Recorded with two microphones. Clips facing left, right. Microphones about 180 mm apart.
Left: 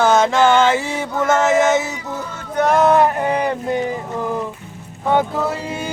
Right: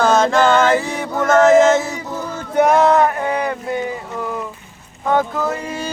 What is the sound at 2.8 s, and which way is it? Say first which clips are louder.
Speech: even; 10° left (ahead or behind).